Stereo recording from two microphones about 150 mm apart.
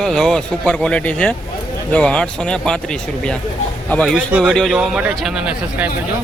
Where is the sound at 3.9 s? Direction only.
5° left (ahead or behind).